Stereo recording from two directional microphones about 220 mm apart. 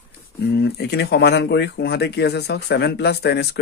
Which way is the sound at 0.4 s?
50° left (ahead or behind).